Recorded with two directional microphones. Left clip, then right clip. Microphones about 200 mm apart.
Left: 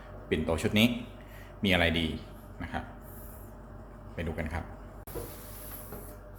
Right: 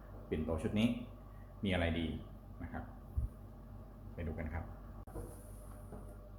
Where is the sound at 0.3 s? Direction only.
30° left (ahead or behind).